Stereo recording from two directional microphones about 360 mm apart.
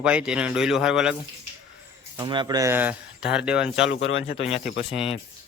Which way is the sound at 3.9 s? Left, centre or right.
Left.